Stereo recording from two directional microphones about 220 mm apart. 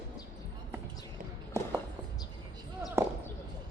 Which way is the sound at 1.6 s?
15° right (ahead or behind).